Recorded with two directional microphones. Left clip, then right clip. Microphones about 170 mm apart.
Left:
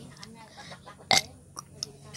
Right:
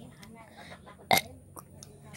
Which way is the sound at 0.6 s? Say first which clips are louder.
Left 4 dB; 20° right (ahead or behind).